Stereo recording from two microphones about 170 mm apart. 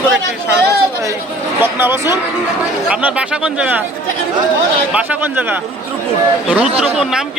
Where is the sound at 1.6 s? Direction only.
10° right (ahead or behind).